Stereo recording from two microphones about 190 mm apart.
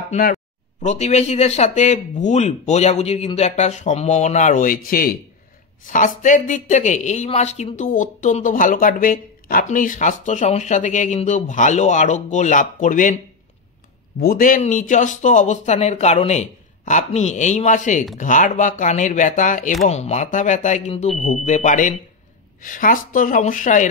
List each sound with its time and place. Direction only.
0.1 s speech: 45° left (ahead or behind)
14.2 s speech: 50° left (ahead or behind)